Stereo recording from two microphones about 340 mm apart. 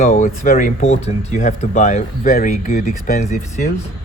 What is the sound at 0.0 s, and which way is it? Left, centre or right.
Speech, left.